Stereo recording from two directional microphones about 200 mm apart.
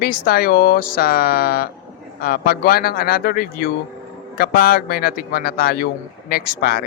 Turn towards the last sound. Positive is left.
turn(degrees=50)  # may be behind; listen again after turning